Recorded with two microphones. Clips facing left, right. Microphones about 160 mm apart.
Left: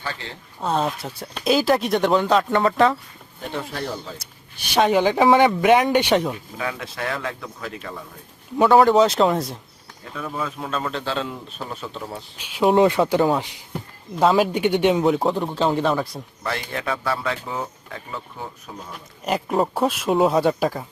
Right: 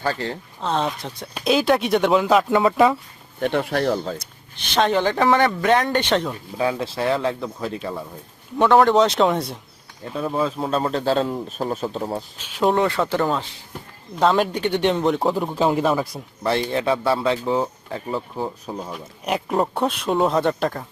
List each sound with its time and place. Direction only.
0.0 s speech: 45° right (ahead or behind)
0.6 s speech: 5° left (ahead or behind)
3.4 s speech: 65° right (ahead or behind)
4.5 s speech: 10° left (ahead or behind)
6.6 s speech: 30° right (ahead or behind)
8.5 s speech: 5° left (ahead or behind)
10.1 s speech: 30° right (ahead or behind)
12.4 s speech: 10° left (ahead or behind)
14.2 s speech: 5° left (ahead or behind)
16.4 s speech: 30° right (ahead or behind)
18.9 s speech: centre (ahead or behind)